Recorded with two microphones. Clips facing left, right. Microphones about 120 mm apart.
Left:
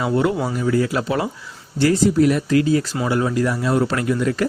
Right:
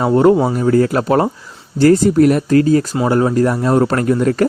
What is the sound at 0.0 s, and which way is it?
Speech, 40° right (ahead or behind).